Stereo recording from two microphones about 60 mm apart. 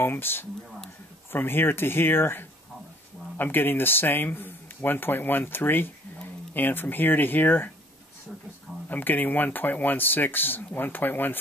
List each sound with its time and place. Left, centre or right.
0.0 s speech: left
8.8 s speech: left